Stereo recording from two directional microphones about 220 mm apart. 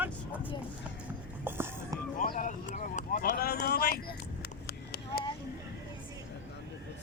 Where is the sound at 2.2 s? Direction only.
40° left (ahead or behind).